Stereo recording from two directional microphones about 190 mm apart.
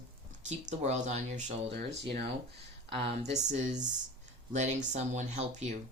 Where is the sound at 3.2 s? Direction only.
40° right (ahead or behind).